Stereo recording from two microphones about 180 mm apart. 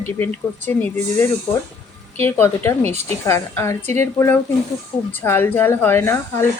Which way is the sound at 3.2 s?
15° left (ahead or behind).